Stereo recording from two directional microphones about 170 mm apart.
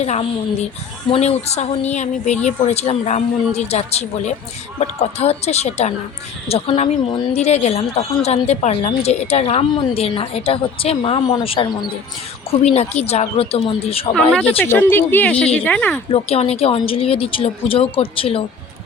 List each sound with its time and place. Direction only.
0.0 s a woman's voice: 40° left (ahead or behind)
14.1 s a woman's voice: 5° left (ahead or behind)
16.1 s a woman's voice: 35° left (ahead or behind)